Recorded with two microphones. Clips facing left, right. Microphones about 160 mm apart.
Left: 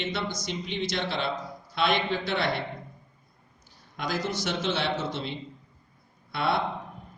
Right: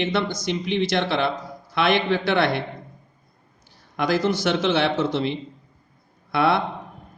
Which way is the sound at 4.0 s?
75° right (ahead or behind).